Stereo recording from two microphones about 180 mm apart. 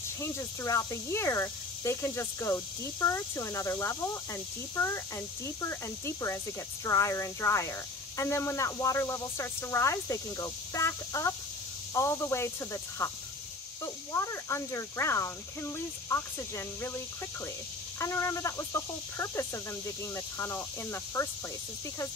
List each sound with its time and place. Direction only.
0.2 s speech: 15° left (ahead or behind)